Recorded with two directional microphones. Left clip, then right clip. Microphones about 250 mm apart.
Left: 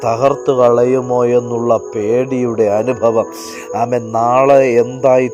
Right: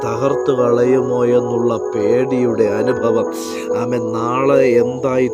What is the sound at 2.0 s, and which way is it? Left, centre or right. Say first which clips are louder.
Speech: right 1 dB; centre.